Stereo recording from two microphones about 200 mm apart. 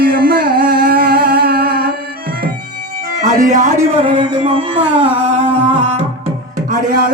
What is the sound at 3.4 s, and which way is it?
Speech, 40° right (ahead or behind).